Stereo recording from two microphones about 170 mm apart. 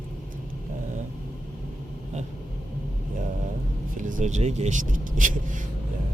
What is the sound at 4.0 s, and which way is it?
Speech, 50° right (ahead or behind).